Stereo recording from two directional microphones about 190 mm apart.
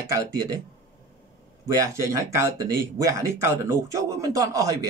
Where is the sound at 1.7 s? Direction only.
15° right (ahead or behind).